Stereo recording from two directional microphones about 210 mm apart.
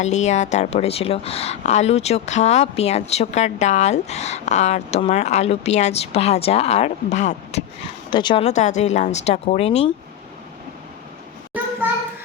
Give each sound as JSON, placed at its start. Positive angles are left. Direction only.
{"t": 0.0, "sound": "a woman's voice", "side_deg": 35}
{"t": 8.1, "sound": "a woman's voice", "side_deg": 20}